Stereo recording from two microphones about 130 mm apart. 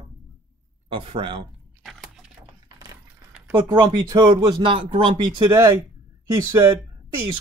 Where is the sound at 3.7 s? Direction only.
30° right (ahead or behind).